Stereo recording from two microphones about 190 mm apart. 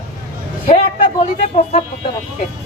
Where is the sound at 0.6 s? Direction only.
35° left (ahead or behind).